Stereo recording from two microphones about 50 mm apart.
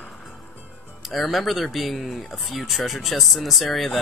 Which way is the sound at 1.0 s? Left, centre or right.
Centre.